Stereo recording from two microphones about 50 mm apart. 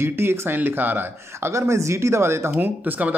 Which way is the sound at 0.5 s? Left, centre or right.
Right.